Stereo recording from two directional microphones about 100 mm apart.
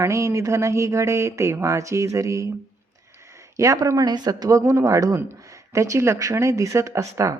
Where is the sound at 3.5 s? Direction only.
35° right (ahead or behind).